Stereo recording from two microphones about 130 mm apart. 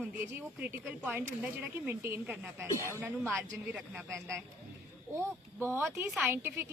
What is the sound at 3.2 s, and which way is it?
Speech, 5° left (ahead or behind).